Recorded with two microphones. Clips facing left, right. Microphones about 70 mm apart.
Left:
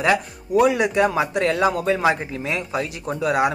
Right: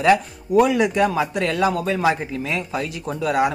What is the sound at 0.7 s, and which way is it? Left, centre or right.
A man's voice, left.